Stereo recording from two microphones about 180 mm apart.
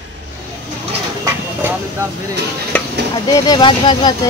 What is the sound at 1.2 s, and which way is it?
Vehicle, 15° right (ahead or behind).